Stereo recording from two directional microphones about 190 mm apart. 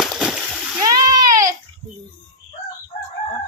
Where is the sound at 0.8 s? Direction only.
20° right (ahead or behind).